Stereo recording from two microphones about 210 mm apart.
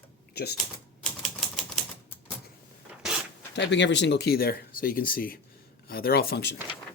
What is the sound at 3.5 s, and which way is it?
Speech, 55° left (ahead or behind).